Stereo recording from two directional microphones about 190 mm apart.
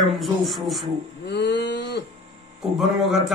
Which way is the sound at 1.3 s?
60° left (ahead or behind).